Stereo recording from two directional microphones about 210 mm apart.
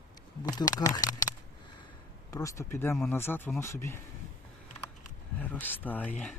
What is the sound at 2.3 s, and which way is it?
Speech, 15° left (ahead or behind).